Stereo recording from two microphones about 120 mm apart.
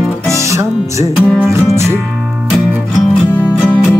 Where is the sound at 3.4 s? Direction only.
15° left (ahead or behind).